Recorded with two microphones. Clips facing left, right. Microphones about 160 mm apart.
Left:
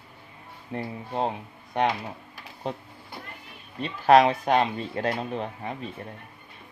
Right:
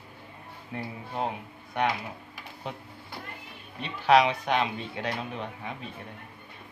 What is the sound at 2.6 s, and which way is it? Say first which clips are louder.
Speech: left 6 dB; 35° left (ahead or behind).